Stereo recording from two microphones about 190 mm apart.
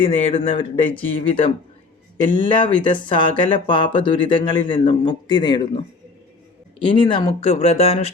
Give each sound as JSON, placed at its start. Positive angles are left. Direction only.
{"t": 0.0, "sound": "speech", "side_deg": 30}